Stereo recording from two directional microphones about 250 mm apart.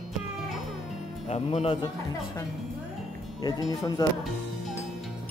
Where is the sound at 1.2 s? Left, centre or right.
Left.